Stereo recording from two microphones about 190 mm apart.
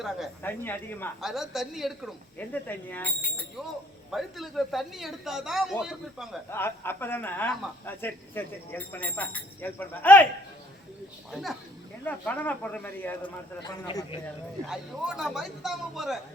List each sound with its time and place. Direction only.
0.4 s speech: 10° left (ahead or behind)
1.2 s a man's voice: centre (ahead or behind)
2.5 s a man's voice: 10° left (ahead or behind)
6.5 s speech: 10° left (ahead or behind)
11.3 s a man's voice: centre (ahead or behind)
12.0 s speech: 10° left (ahead or behind)
13.2 s a man's voice: 25° left (ahead or behind)
14.7 s a man's voice: centre (ahead or behind)